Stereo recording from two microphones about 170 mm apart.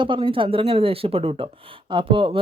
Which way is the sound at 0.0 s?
30° right (ahead or behind).